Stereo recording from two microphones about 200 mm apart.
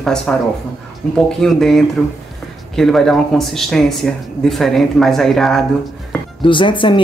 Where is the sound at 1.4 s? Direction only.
Centre (ahead or behind).